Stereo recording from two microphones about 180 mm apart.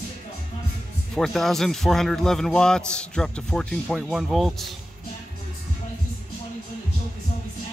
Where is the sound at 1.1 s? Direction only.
Centre (ahead or behind).